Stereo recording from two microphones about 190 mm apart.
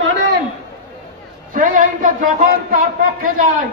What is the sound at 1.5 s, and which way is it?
A man's voice, 45° right (ahead or behind).